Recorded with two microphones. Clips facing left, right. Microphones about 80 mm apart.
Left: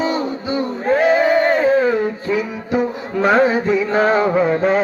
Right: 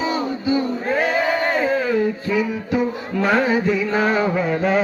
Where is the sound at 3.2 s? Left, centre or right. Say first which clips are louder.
Left 4 dB; left.